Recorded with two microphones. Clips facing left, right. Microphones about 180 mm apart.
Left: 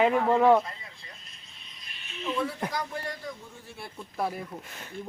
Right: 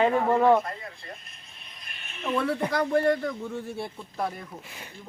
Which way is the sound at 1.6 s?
55° right (ahead or behind).